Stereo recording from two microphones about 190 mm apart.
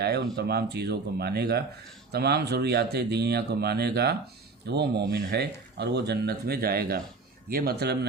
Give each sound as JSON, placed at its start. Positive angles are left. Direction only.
{"t": 0.0, "sound": "speech", "side_deg": -60}